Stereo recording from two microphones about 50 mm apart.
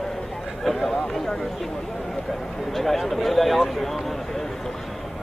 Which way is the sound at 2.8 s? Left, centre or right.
Centre.